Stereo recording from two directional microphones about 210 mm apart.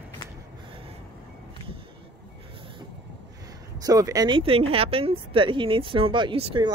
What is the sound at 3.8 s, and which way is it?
Speech, 15° right (ahead or behind).